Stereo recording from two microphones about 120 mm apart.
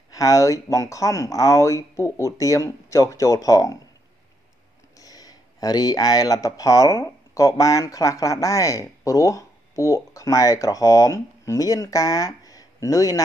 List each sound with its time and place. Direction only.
0.1 s speech: 30° left (ahead or behind)
4.9 s speech: 30° left (ahead or behind)